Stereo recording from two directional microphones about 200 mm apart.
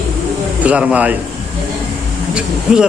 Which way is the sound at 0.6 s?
5° right (ahead or behind).